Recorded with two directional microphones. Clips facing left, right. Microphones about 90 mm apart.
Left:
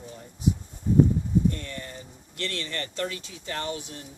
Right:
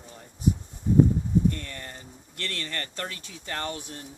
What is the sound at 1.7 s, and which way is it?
Speech, 45° right (ahead or behind).